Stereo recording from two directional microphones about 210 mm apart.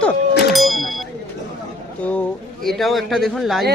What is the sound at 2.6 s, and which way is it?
Speech, centre (ahead or behind).